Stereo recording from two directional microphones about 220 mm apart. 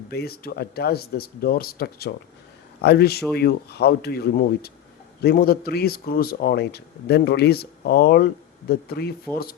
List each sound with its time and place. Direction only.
0.1 s speech: 45° left (ahead or behind)